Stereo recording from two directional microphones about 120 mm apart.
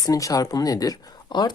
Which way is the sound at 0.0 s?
30° left (ahead or behind).